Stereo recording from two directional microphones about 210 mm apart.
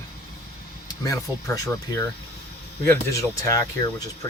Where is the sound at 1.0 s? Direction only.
15° left (ahead or behind).